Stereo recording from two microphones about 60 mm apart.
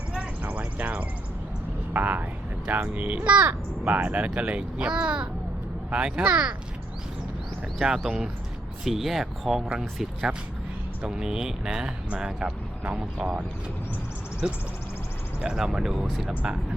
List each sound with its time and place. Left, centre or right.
0.2 s a sound: right
1.9 s speech: right
7.8 s speech: centre
15.4 s speech: centre
16.3 s speech: right